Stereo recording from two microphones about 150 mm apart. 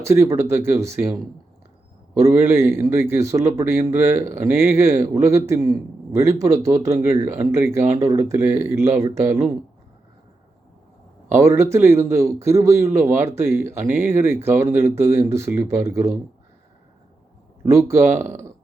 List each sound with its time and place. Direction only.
0.0 s speech: 20° right (ahead or behind)
2.2 s a man's voice: 15° right (ahead or behind)
11.3 s speech: 20° right (ahead or behind)
17.7 s speech: 20° right (ahead or behind)